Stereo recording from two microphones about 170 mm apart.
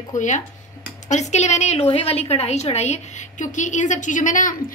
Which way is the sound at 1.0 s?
45° left (ahead or behind).